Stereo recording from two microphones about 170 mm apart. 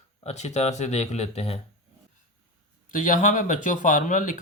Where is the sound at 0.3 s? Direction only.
40° left (ahead or behind).